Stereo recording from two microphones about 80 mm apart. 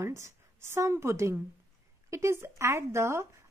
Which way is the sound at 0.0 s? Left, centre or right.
Right.